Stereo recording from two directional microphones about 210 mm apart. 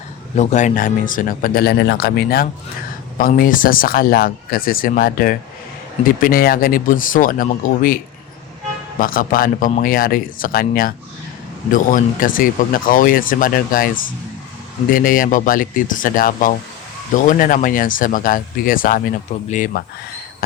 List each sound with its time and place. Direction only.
0.3 s speech: 35° left (ahead or behind)
9.0 s speech: 40° left (ahead or behind)